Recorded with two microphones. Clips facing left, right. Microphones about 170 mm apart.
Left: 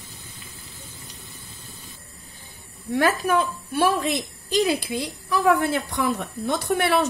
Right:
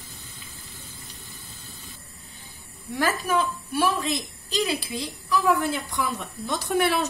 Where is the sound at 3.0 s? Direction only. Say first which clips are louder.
Left 4 dB; 60° left (ahead or behind).